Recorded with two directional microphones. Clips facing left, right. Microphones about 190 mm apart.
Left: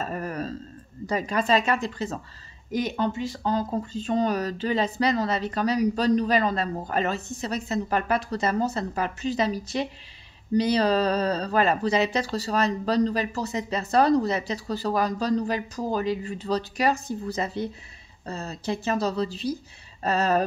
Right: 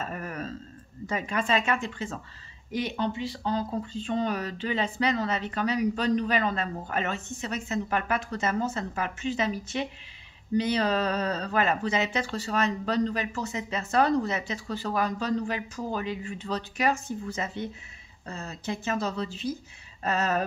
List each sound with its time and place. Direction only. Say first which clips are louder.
0.0 s speech: left 4 dB; 35° left (ahead or behind)